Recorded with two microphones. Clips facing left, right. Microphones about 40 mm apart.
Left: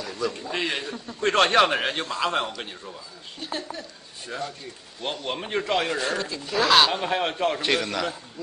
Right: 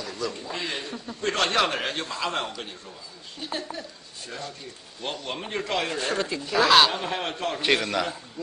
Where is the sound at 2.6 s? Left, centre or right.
Centre.